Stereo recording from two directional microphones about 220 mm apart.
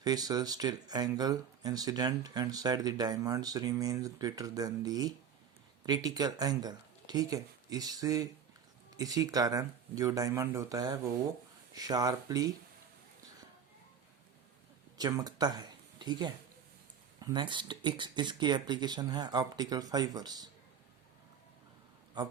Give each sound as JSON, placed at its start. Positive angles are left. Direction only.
{"t": 0.0, "sound": "speech", "side_deg": -15}
{"t": 14.9, "sound": "speech", "side_deg": -15}